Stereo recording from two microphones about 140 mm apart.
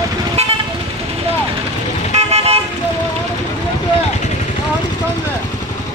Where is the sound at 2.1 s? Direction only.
45° right (ahead or behind).